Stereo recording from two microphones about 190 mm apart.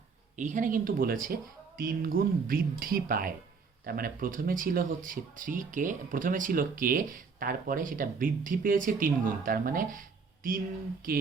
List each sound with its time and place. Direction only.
0.3 s speech: 40° right (ahead or behind)